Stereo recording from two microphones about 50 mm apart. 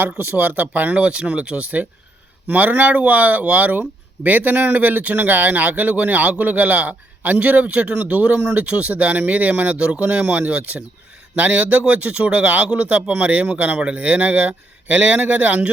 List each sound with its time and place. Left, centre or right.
0.2 s speech: right
0.9 s a man's voice: right